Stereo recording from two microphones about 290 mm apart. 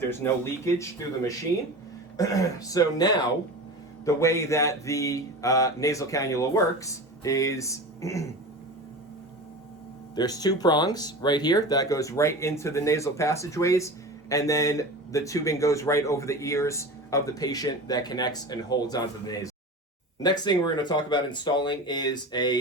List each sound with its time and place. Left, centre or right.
0.1 s speech: centre
10.2 s speech: centre